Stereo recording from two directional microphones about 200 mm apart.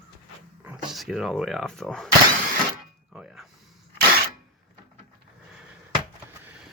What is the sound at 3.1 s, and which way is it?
Music, 5° right (ahead or behind).